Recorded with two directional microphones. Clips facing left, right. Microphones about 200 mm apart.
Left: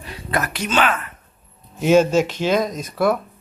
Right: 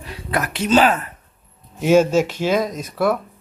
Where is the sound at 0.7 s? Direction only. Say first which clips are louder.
Right 7 dB; 35° right (ahead or behind).